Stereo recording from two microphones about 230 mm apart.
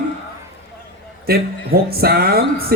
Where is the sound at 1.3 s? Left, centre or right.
Right.